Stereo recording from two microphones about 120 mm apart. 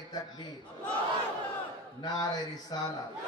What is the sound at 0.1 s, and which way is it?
Speech, 35° left (ahead or behind).